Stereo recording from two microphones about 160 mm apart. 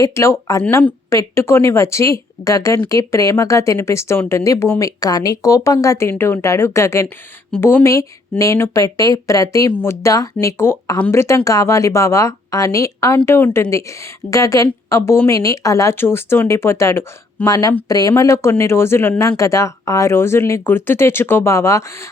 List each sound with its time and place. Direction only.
0.0 s a woman's voice: 20° left (ahead or behind)